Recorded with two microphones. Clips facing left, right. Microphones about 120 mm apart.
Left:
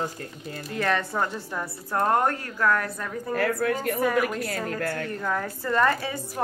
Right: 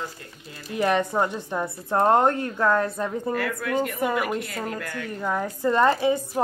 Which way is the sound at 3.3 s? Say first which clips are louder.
Left 3 dB; 45° left (ahead or behind).